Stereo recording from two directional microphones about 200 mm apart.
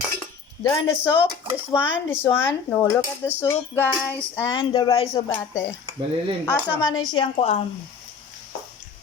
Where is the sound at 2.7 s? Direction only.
15° left (ahead or behind).